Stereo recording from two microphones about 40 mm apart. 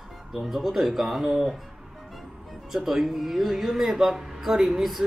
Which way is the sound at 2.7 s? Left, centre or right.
Centre.